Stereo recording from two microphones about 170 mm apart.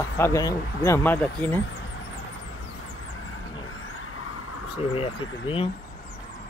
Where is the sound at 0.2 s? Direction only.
20° left (ahead or behind).